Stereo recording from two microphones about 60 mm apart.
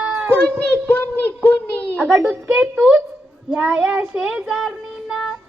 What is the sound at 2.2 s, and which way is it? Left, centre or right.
Child singing, right.